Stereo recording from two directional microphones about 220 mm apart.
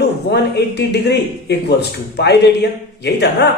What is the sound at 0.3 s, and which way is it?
Speech, 50° left (ahead or behind).